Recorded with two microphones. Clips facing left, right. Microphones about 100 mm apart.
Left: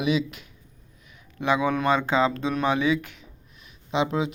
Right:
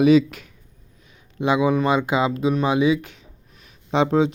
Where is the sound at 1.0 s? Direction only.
25° right (ahead or behind).